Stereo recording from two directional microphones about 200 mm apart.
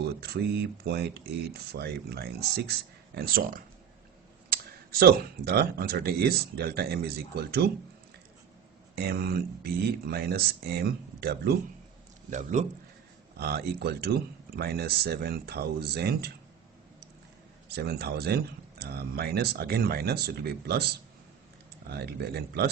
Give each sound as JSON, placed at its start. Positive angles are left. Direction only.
{"t": 0.2, "sound": "speech", "side_deg": -50}
{"t": 9.0, "sound": "speech", "side_deg": -50}
{"t": 12.3, "sound": "a man's voice", "side_deg": -35}
{"t": 13.4, "sound": "speech", "side_deg": -50}
{"t": 17.7, "sound": "speech", "side_deg": -55}